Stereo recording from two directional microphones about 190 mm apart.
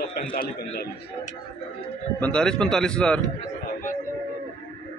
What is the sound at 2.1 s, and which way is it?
A man's voice, 5° left (ahead or behind).